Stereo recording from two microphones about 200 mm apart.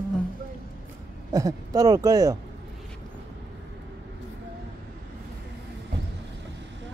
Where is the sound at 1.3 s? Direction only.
15° right (ahead or behind).